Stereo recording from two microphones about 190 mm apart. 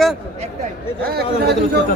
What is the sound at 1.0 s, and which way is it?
Speech, 60° right (ahead or behind).